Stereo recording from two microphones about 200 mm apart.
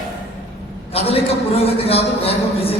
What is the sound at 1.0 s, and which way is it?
A man's voice, 30° left (ahead or behind).